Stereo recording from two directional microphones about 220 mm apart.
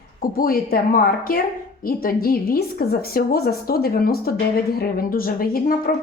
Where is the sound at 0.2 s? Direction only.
40° left (ahead or behind).